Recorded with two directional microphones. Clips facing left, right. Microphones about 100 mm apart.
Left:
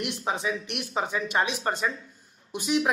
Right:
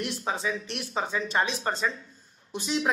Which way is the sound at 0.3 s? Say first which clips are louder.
Left 2 dB; 20° left (ahead or behind).